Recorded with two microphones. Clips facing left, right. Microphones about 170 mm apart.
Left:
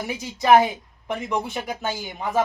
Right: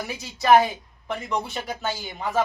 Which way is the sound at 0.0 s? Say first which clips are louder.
Left 2 dB; 20° left (ahead or behind).